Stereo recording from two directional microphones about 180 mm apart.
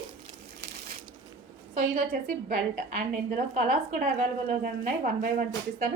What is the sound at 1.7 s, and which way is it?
A woman's voice, 50° right (ahead or behind).